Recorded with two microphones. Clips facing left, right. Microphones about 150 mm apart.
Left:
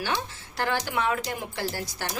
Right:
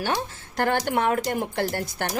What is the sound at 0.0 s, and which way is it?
Speech, 45° right (ahead or behind).